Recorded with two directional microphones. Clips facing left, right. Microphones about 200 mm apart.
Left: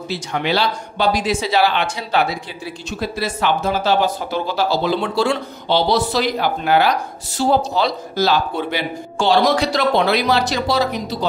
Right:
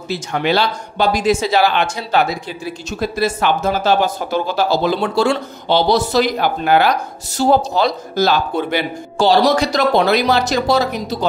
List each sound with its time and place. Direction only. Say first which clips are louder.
0.1 s speech: right 3 dB; 50° right (ahead or behind)
9.2 s speech: right 2 dB; 35° right (ahead or behind)